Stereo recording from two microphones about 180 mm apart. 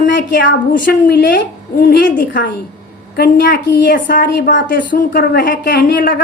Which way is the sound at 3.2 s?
65° left (ahead or behind).